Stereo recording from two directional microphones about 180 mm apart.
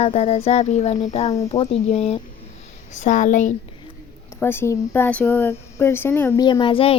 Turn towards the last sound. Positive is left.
turn(degrees=30)  # may be behind; listen again after turning